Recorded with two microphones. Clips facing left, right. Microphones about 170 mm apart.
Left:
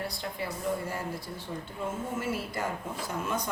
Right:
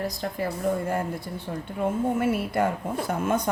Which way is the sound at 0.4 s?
55° right (ahead or behind).